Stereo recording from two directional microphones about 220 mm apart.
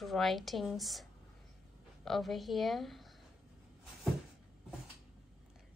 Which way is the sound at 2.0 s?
Centre (ahead or behind).